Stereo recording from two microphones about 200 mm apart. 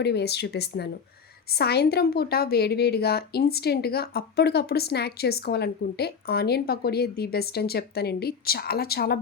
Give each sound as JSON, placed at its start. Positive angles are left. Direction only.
{"t": 0.0, "sound": "a woman's voice", "side_deg": 55}